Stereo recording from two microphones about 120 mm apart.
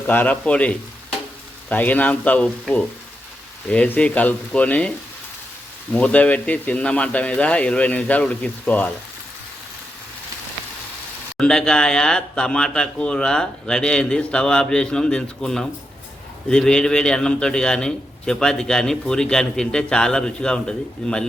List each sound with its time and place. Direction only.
0.1 s speech: 15° left (ahead or behind)
11.3 s a man's voice: 5° left (ahead or behind)